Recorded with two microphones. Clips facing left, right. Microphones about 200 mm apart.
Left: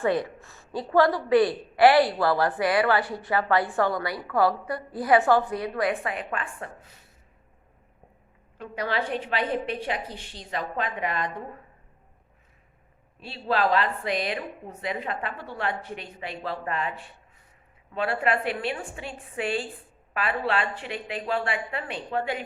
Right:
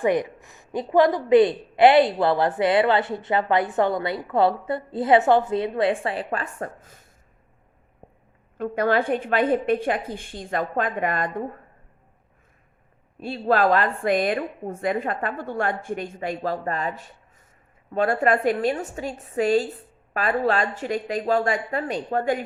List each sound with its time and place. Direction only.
0.0 s a woman's voice: 15° right (ahead or behind); by 7.1 s 45° right (ahead or behind)
8.5 s a woman's voice: 50° right (ahead or behind)
13.1 s a woman's voice: 50° right (ahead or behind)